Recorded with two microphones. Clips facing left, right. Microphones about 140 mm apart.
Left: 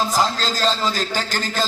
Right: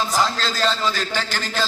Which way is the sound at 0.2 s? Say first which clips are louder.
Left 1 dB; 40° left (ahead or behind).